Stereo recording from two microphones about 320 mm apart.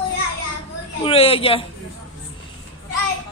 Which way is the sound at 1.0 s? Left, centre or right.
Centre.